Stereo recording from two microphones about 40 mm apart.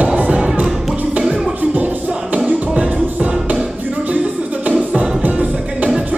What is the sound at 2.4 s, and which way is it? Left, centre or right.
Music, right.